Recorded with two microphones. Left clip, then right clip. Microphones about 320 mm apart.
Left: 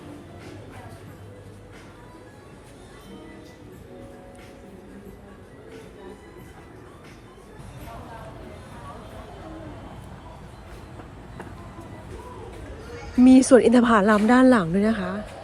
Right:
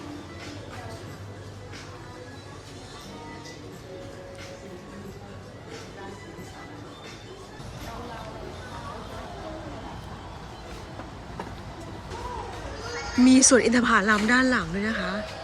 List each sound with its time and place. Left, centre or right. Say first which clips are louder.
13.2 s speech: left 4 dB; centre